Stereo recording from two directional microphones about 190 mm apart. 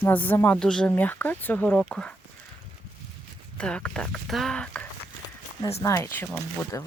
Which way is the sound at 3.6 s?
5° left (ahead or behind).